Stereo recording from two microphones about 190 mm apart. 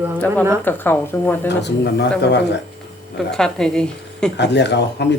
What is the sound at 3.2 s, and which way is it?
Speech, 5° left (ahead or behind).